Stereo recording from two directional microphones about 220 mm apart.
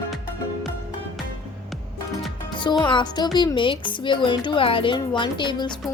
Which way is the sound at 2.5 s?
20° left (ahead or behind).